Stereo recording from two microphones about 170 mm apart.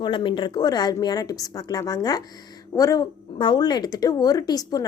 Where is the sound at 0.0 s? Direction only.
25° left (ahead or behind).